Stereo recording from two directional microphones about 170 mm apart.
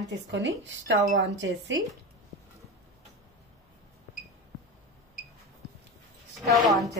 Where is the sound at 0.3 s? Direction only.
90° right.